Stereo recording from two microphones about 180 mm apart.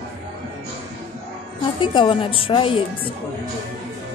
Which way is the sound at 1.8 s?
30° left (ahead or behind).